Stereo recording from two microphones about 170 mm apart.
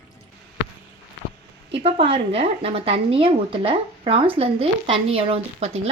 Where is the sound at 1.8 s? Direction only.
35° right (ahead or behind).